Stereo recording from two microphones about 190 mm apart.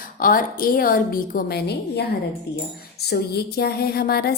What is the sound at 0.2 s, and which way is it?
A woman's voice, 50° left (ahead or behind).